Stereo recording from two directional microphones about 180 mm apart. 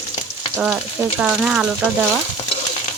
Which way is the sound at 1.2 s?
5° right (ahead or behind).